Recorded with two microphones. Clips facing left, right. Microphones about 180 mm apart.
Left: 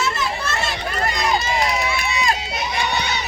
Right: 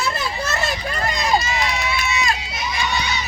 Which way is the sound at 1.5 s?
50° left (ahead or behind).